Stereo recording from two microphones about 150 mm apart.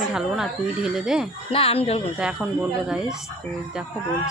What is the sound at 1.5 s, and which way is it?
Speech, 40° left (ahead or behind).